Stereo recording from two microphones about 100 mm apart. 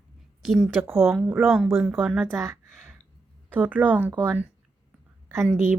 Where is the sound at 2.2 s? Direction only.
25° right (ahead or behind).